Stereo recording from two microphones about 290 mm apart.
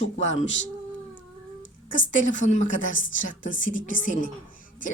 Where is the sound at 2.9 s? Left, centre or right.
Left.